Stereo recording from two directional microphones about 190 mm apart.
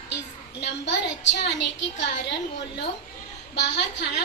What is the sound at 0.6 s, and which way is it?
A woman's voice, 65° left (ahead or behind).